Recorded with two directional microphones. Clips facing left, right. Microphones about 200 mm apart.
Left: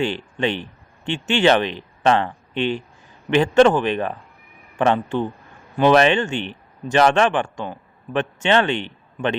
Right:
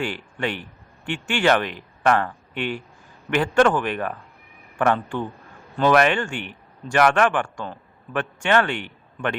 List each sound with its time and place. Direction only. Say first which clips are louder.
0.0 s a man's voice: left 5 dB; 20° left (ahead or behind)